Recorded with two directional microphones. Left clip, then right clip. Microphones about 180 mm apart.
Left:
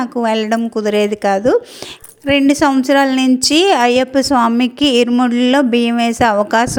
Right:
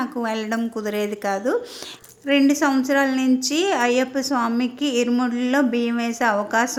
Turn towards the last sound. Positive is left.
turn(degrees=45)  # may be behind; listen again after turning